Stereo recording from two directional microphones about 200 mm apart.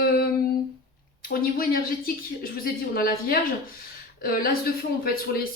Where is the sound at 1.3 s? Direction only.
45° left (ahead or behind).